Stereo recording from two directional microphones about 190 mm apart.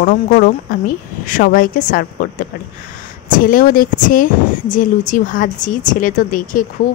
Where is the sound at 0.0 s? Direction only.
55° left (ahead or behind).